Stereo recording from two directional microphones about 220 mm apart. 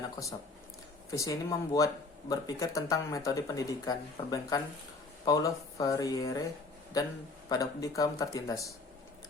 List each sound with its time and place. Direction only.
1.1 s speech: 15° left (ahead or behind)